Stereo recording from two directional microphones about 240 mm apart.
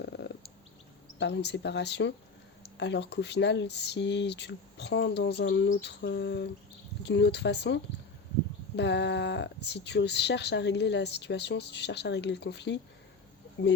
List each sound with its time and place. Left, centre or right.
0.0 s bird: left
1.2 s speech: left